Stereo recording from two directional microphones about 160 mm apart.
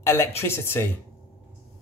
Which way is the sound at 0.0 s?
15° left (ahead or behind).